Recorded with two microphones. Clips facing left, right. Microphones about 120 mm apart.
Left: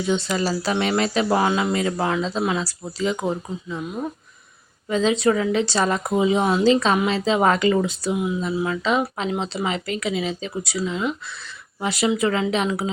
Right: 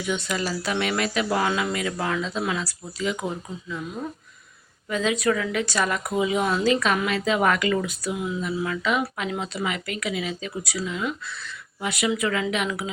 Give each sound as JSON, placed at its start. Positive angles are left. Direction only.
{"t": 0.0, "sound": "a woman's voice", "side_deg": 30}
{"t": 3.8, "sound": "a woman's voice", "side_deg": 20}